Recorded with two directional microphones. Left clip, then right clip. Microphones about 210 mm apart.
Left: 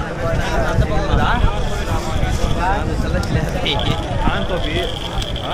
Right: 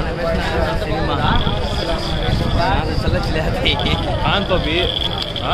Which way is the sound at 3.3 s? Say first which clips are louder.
Right 2 dB; 45° right (ahead or behind).